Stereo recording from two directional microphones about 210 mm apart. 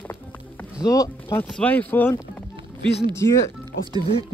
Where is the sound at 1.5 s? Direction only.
5° left (ahead or behind).